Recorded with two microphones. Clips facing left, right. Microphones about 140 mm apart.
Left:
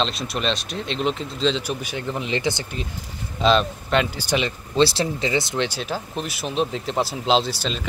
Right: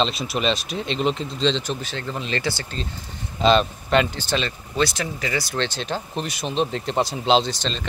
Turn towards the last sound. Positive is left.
turn(degrees=5)  # may be behind; listen again after turning